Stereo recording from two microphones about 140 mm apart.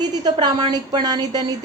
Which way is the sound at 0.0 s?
30° right (ahead or behind).